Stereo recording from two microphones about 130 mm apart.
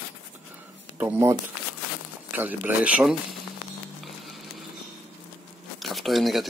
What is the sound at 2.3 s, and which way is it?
Speech, 15° right (ahead or behind).